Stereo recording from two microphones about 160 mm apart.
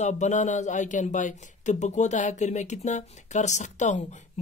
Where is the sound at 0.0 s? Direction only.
50° left (ahead or behind).